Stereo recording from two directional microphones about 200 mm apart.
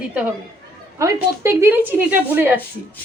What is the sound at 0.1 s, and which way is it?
A woman's voice, 5° right (ahead or behind).